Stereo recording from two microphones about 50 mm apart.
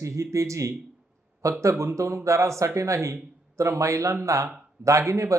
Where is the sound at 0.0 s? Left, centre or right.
Right.